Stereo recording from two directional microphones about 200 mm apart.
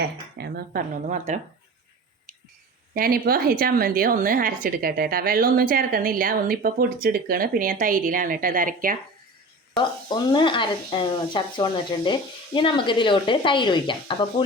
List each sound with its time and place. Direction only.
0.3 s a woman's voice: 55° right (ahead or behind); by 1.4 s 35° right (ahead or behind)
2.9 s a woman's voice: 45° right (ahead or behind)
10.1 s speech: 25° left (ahead or behind)